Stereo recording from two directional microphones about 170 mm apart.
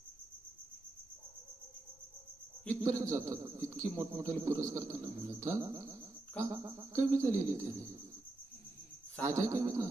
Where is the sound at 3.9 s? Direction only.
20° right (ahead or behind).